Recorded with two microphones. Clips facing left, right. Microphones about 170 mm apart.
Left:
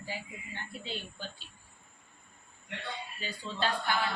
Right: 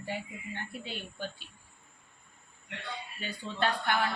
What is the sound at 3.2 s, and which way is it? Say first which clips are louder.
Speech: right 2 dB; 60° right (ahead or behind).